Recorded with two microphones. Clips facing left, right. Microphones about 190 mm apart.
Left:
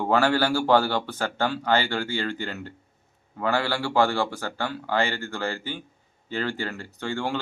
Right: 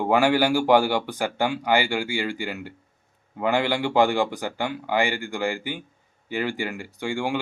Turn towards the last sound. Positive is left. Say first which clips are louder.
# right 2 dB
turn(degrees=-15)  # may be behind; listen again after turning